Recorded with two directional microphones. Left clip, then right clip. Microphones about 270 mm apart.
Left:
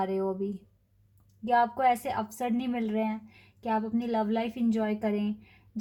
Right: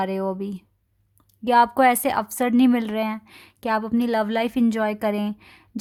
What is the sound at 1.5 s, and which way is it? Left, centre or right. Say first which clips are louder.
A woman's voice: right 8 dB; right.